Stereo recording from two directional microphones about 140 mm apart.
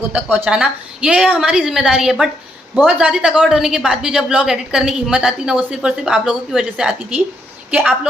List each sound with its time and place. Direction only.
0.1 s a woman's voice: 10° right (ahead or behind)